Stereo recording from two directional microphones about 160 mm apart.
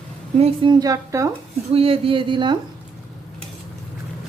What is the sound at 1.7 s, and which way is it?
Speech, 35° right (ahead or behind).